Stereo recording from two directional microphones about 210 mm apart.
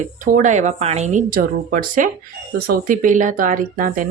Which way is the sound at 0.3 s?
40° right (ahead or behind).